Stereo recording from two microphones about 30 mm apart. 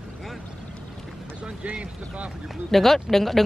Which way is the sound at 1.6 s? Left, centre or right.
Right.